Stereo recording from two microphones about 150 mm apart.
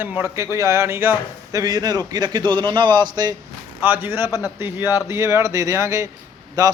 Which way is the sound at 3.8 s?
15° right (ahead or behind).